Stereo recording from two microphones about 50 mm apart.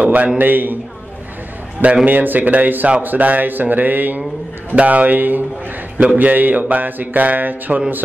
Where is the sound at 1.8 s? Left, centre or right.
Right.